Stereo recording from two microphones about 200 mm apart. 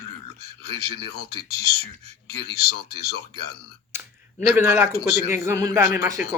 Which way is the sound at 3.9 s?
10° right (ahead or behind).